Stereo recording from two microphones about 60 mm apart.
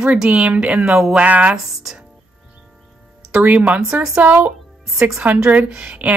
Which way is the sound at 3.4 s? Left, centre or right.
Right.